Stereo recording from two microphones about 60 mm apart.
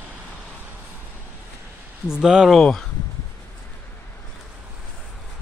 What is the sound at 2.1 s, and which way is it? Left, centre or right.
Speech, centre.